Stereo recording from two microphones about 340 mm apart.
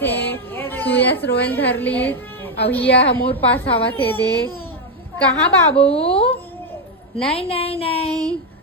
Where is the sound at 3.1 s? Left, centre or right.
Centre.